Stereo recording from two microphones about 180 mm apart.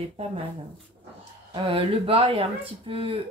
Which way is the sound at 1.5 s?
30° right (ahead or behind).